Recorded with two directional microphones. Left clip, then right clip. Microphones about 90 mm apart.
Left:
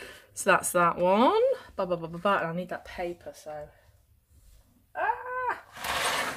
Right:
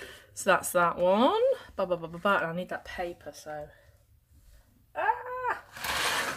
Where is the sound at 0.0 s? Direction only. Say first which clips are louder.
Left 2 dB; 15° left (ahead or behind).